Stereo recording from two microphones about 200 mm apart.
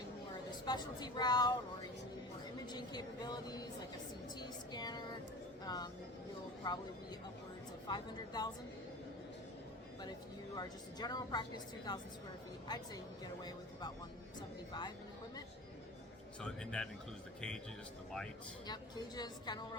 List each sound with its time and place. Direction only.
0.6 s a woman's voice: 20° left (ahead or behind)
2.7 s a woman's voice: 20° left (ahead or behind)
7.9 s a woman's voice: 20° left (ahead or behind)
10.0 s a woman's voice: 20° left (ahead or behind)
14.7 s a woman's voice: 20° left (ahead or behind)
16.4 s speech: 5° left (ahead or behind)
18.7 s a woman's voice: 20° left (ahead or behind)